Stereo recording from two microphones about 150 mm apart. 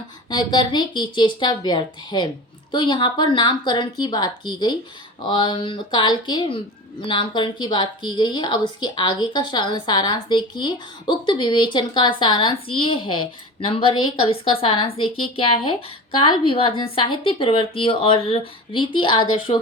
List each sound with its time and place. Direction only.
0.3 s a woman's voice: 30° left (ahead or behind)